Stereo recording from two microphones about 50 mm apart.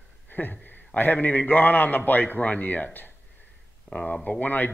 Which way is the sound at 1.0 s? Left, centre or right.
Left.